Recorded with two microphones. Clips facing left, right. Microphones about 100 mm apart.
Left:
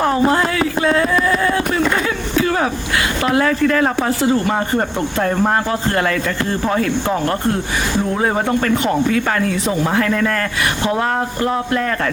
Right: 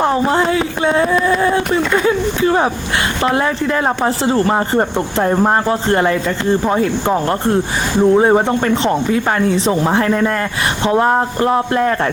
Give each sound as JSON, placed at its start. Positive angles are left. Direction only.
{"t": 0.3, "sound": "a man's voice", "side_deg": -25}
{"t": 1.4, "sound": "a sound", "side_deg": -25}
{"t": 3.2, "sound": "a man's voice", "side_deg": -25}